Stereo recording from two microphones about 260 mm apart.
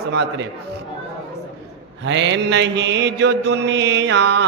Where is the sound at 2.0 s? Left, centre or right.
Right.